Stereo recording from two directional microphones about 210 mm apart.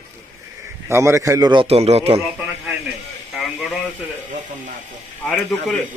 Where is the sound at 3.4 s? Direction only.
Centre (ahead or behind).